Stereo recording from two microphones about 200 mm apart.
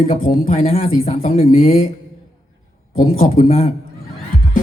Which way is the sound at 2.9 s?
45° left (ahead or behind).